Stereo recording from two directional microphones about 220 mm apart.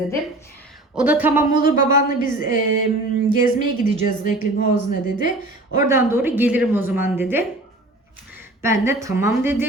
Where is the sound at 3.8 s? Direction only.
35° left (ahead or behind).